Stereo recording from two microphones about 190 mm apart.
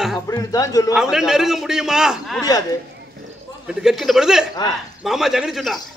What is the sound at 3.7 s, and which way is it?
A man's voice, centre (ahead or behind).